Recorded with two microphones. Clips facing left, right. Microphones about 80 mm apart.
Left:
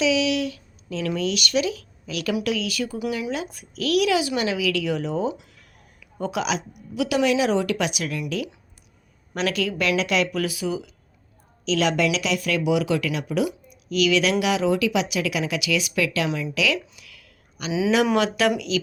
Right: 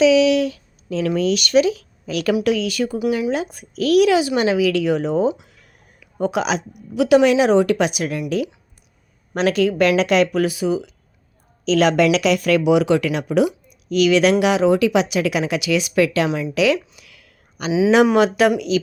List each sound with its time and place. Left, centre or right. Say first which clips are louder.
0.0 s speech: right 8 dB; right
1.7 s a sound: right 5 dB; right
2.4 s speech: right 6 dB; right
9.3 s speech: right 7 dB; right
11.6 s a woman's voice: right 6 dB; right
17.7 s speech: right 6 dB; centre
17.9 s speech: right 6 dB; right